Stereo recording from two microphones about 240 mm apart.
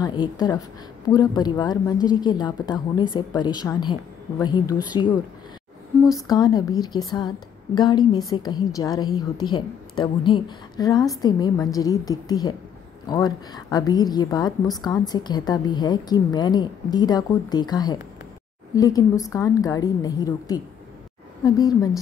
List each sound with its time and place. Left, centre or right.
0.0 s a woman's voice: centre